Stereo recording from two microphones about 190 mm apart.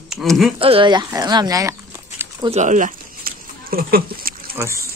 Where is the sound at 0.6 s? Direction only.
30° right (ahead or behind).